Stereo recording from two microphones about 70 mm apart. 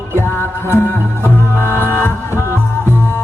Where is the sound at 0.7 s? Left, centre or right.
Left.